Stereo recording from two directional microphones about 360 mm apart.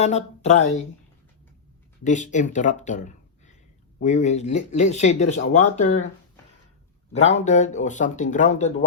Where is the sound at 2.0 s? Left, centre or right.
Left.